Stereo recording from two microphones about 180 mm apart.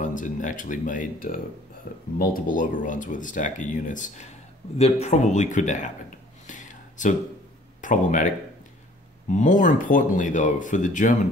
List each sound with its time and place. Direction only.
0.0 s speech: 45° left (ahead or behind)
9.3 s speech: 45° left (ahead or behind)